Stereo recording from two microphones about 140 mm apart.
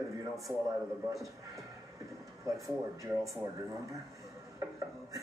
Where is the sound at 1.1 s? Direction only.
25° right (ahead or behind).